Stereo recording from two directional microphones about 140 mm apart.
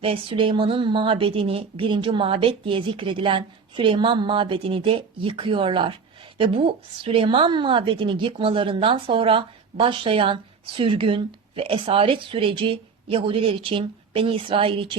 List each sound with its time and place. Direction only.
0.0 s a woman's voice: 40° right (ahead or behind)